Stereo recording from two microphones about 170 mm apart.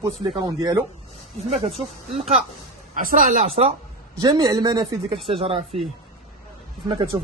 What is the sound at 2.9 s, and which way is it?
Speech, 40° right (ahead or behind).